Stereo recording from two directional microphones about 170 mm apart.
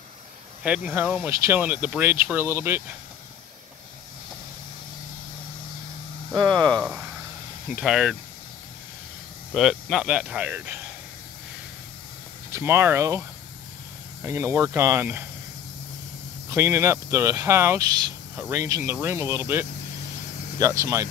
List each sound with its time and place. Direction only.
0.7 s speech: 5° right (ahead or behind)
6.5 s speech: 5° left (ahead or behind)
9.5 s speech: centre (ahead or behind)
12.4 s speech: 15° right (ahead or behind)
14.2 s speech: 15° right (ahead or behind)
16.4 s speech: 15° right (ahead or behind)